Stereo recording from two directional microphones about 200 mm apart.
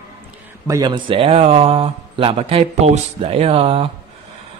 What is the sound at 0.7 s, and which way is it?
Speech, 20° right (ahead or behind).